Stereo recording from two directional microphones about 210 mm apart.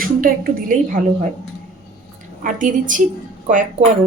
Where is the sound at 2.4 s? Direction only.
40° right (ahead or behind).